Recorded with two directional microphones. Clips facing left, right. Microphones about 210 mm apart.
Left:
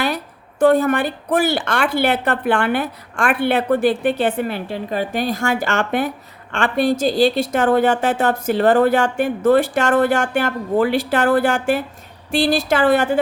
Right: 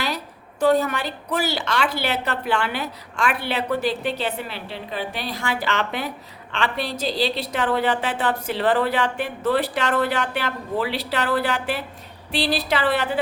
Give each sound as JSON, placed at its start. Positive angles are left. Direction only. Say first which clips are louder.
{"t": 0.6, "sound": "a woman's voice", "louder": "left 5 dB", "side_deg": 50}